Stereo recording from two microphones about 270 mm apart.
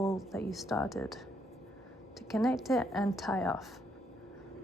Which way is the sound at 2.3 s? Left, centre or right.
Centre.